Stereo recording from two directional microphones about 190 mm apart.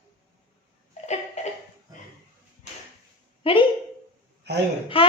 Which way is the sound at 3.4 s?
30° left (ahead or behind).